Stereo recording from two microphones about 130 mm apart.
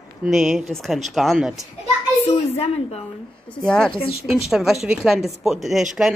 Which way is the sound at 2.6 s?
50° left (ahead or behind).